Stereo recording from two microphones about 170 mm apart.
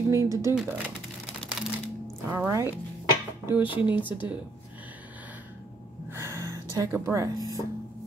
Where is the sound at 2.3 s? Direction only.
15° right (ahead or behind).